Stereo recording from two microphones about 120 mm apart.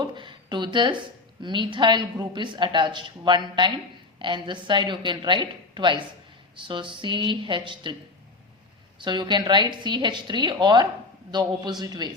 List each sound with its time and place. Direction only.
0.0 s a sound: 40° right (ahead or behind)
1.4 s a woman's voice: 40° right (ahead or behind)
9.0 s a woman's voice: 40° right (ahead or behind)